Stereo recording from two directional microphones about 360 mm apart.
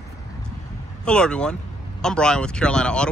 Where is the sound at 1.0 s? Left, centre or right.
Centre.